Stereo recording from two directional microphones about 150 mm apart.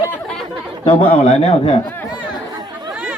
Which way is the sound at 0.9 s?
35° left (ahead or behind).